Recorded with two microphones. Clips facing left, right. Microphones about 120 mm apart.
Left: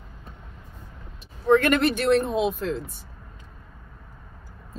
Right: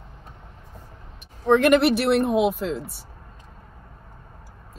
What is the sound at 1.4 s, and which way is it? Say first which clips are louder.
A woman's voice: right 2 dB; 15° right (ahead or behind).